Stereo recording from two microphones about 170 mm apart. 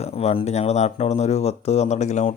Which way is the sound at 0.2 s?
40° left (ahead or behind).